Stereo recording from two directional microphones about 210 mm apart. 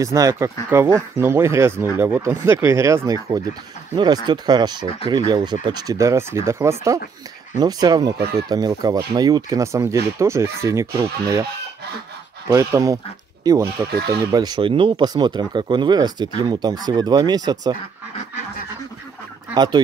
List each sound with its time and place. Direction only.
0.0 s speech: 15° right (ahead or behind)
12.4 s speech: 15° right (ahead or behind)
19.5 s speech: 20° right (ahead or behind)